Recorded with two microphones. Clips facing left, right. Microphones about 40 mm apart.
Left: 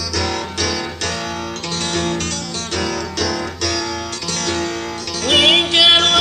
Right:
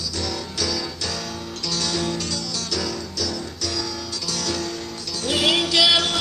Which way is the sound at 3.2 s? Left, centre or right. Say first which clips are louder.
Left 7 dB; left.